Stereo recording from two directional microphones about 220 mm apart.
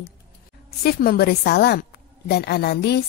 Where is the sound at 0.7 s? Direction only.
45° left (ahead or behind).